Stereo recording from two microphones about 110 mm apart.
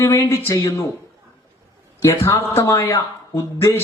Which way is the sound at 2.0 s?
25° left (ahead or behind).